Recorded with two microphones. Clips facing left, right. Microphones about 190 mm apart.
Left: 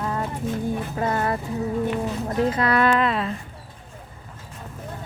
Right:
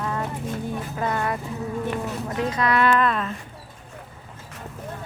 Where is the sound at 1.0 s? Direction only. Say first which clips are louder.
Left 1 dB; 25° left (ahead or behind).